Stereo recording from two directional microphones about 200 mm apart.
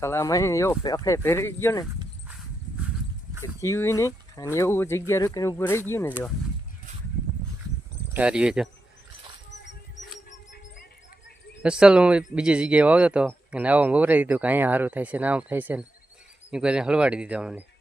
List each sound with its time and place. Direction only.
0.0 s speech: 15° left (ahead or behind)
3.6 s speech: 15° left (ahead or behind)
8.1 s speech: 5° right (ahead or behind)
10.2 s a sound: 50° left (ahead or behind)
11.6 s speech: 5° right (ahead or behind)